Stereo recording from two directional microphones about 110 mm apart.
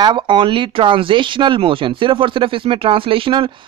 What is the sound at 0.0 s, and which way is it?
Speech, 45° right (ahead or behind).